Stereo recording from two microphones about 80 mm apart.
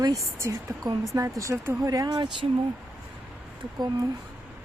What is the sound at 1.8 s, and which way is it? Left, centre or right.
Speech, right.